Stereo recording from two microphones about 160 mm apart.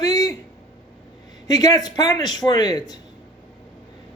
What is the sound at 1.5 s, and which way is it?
Speech, 25° left (ahead or behind).